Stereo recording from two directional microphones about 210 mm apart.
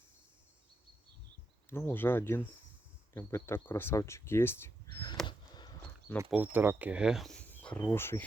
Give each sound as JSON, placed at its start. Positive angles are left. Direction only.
{"t": 1.7, "sound": "speech", "side_deg": 10}
{"t": 5.2, "sound": "a sound", "side_deg": 20}
{"t": 6.3, "sound": "speech", "side_deg": -10}